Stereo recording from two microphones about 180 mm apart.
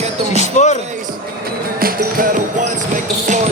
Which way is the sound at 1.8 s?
50° right (ahead or behind).